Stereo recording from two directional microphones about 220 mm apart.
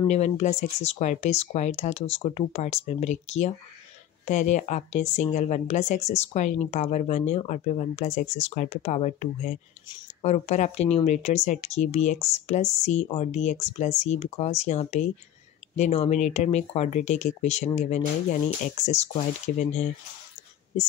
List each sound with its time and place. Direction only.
0.0 s speech: 30° left (ahead or behind)
9.8 s speech: 20° left (ahead or behind)
10.3 s speech: 30° left (ahead or behind)